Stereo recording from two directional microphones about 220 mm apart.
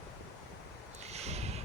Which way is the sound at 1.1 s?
30° right (ahead or behind).